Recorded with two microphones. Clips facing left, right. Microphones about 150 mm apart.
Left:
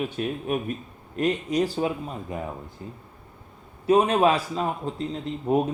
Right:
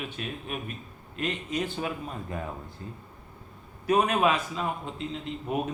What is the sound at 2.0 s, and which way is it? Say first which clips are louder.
A man's voice: left 3 dB; 15° left (ahead or behind).